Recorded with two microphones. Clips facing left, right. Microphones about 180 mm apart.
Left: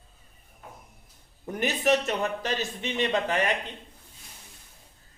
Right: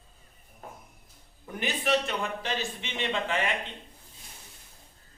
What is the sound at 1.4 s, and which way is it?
Speech, 40° left (ahead or behind).